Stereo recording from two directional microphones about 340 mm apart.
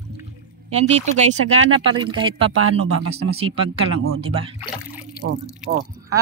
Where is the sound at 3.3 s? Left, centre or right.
Centre.